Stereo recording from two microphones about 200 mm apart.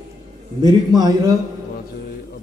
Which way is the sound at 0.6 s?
20° right (ahead or behind).